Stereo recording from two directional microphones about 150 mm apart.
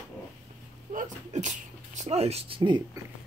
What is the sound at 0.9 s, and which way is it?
Speech, 55° right (ahead or behind).